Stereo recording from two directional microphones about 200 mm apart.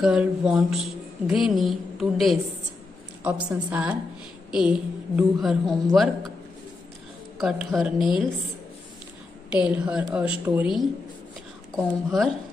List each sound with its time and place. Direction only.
0.0 s a woman's voice: 5° right (ahead or behind)
7.3 s a woman's voice: centre (ahead or behind)
9.5 s a woman's voice: 5° right (ahead or behind)